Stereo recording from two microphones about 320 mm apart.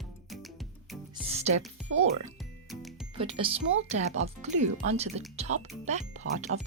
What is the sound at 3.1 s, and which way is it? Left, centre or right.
Speech, centre.